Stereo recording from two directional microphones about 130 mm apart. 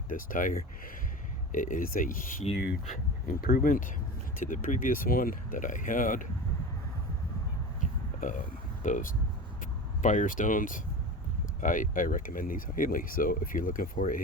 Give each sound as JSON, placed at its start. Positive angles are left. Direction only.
{"t": 0.1, "sound": "speech", "side_deg": 90}
{"t": 2.5, "sound": "speech", "side_deg": 70}
{"t": 8.2, "sound": "speech", "side_deg": 75}